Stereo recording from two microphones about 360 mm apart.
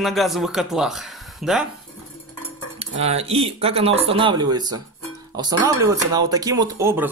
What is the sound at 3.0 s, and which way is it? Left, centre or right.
Speech, centre.